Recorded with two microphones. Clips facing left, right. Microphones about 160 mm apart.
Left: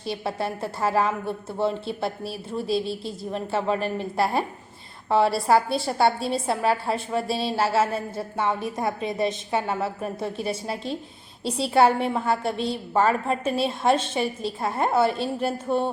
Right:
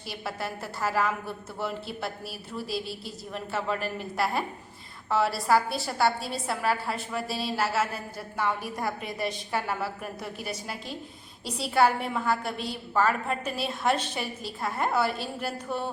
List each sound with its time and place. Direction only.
0.0 s a woman's voice: 25° left (ahead or behind)